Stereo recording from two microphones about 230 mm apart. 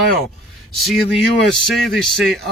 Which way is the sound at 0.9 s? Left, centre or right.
Centre.